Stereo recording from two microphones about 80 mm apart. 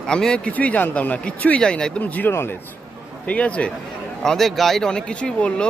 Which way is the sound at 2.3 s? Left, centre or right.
Left.